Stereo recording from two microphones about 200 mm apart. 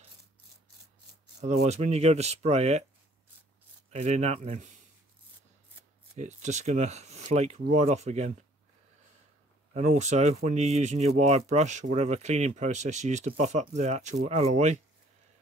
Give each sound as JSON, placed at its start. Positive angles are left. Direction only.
{"t": 1.4, "sound": "speech", "side_deg": -35}
{"t": 3.9, "sound": "speech", "side_deg": -35}
{"t": 6.1, "sound": "speech", "side_deg": -35}
{"t": 9.8, "sound": "speech", "side_deg": -35}